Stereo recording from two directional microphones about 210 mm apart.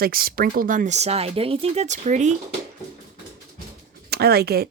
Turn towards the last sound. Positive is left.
turn(degrees=-50)  # may be behind; listen again after turning